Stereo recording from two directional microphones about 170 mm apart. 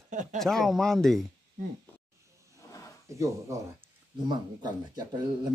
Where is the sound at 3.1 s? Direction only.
15° right (ahead or behind).